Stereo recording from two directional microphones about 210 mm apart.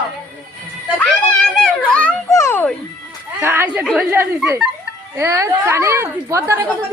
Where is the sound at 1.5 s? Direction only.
5° left (ahead or behind).